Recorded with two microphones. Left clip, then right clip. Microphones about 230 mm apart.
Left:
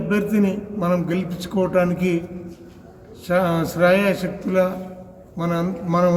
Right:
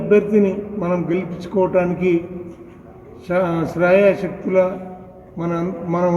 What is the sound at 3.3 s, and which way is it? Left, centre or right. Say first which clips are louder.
Speech: right 1 dB; left.